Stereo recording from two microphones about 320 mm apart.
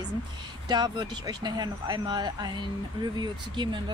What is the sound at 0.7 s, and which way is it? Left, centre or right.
Speech, centre.